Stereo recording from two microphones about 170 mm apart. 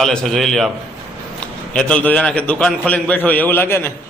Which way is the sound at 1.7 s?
5° left (ahead or behind).